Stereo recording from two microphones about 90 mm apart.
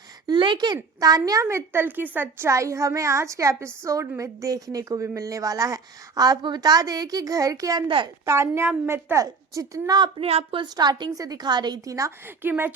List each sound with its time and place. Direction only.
0.3 s speech: 60° right (ahead or behind)
0.9 s a woman's voice: 45° right (ahead or behind)
7.9 s a woman's voice: 70° right (ahead or behind)
8.2 s a woman's voice: 30° right (ahead or behind)
9.1 s a woman's voice: 35° right (ahead or behind)
10.2 s speech: 80° right
10.8 s a woman's voice: 55° right (ahead or behind); by 12.1 s 40° right (ahead or behind)
12.4 s a woman's voice: 25° right (ahead or behind)